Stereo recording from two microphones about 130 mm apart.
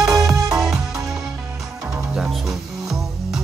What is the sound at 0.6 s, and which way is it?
Music, 5° right (ahead or behind).